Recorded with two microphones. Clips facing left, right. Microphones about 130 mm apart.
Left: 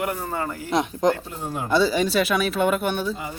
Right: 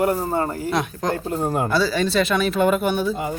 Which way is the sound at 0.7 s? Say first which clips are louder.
Left 6 dB; 20° left (ahead or behind).